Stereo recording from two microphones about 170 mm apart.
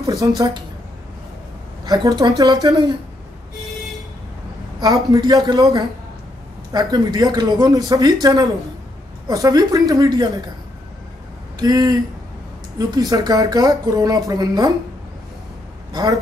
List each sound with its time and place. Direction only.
0.2 s speech: 20° right (ahead or behind)
1.9 s speech: 20° right (ahead or behind)
4.7 s speech: 20° right (ahead or behind)
11.6 s speech: 25° right (ahead or behind)
15.9 s speech: 20° right (ahead or behind)